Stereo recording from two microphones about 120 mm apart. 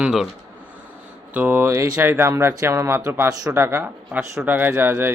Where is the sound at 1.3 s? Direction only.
15° right (ahead or behind).